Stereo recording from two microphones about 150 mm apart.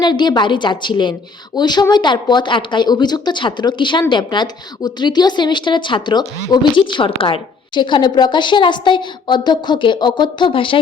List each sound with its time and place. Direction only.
0.0 s a woman's voice: 30° left (ahead or behind)